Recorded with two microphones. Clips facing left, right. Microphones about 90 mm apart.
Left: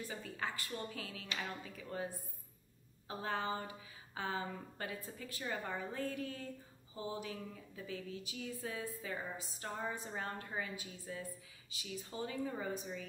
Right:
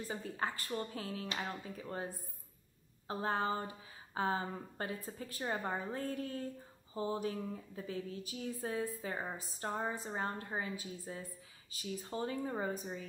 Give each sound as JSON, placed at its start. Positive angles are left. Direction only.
{"t": 0.0, "sound": "a woman's voice", "side_deg": -35}
{"t": 3.1, "sound": "a woman's voice", "side_deg": -35}